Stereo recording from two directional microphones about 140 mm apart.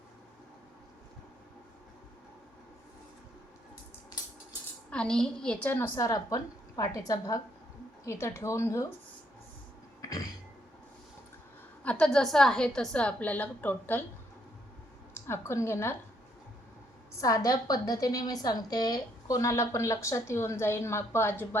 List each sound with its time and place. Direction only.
4.9 s a woman's voice: 5° left (ahead or behind); by 8.9 s 20° left (ahead or behind)
10.0 s throat clearing: 25° left (ahead or behind)
11.8 s a woman's voice: 10° left (ahead or behind)
15.3 s a woman's voice: 20° left (ahead or behind)
17.2 s a woman's voice: 25° left (ahead or behind)